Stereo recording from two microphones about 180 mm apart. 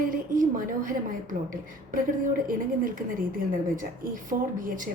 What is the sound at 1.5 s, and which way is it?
A woman's voice, 50° right (ahead or behind).